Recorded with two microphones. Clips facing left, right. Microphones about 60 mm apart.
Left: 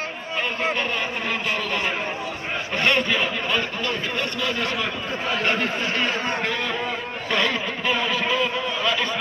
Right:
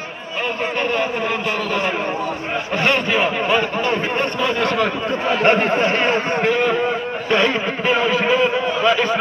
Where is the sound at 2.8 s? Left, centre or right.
Right.